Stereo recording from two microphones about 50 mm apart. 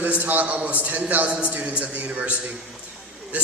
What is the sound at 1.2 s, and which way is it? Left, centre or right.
A man's voice, right.